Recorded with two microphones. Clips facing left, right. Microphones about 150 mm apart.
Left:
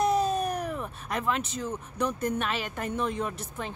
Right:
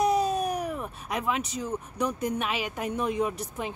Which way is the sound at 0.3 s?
10° right (ahead or behind).